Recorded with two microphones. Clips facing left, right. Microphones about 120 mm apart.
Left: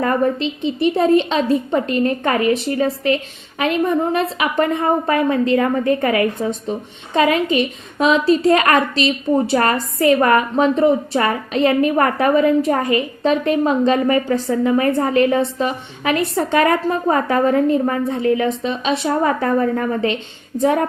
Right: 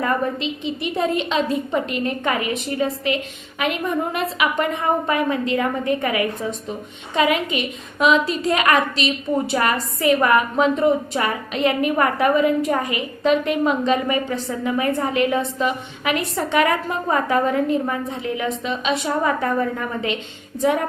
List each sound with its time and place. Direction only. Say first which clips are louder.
0.0 s a woman's voice: left 4 dB; 35° left (ahead or behind)